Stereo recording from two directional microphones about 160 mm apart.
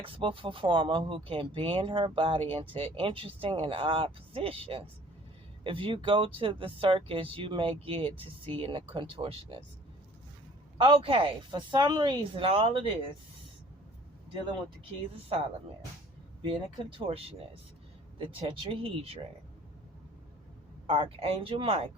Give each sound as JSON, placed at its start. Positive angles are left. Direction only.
{"t": 0.0, "sound": "speech", "side_deg": -35}
{"t": 10.8, "sound": "speech", "side_deg": -30}
{"t": 15.3, "sound": "speech", "side_deg": -35}
{"t": 18.2, "sound": "speech", "side_deg": -35}
{"t": 20.8, "sound": "speech", "side_deg": -35}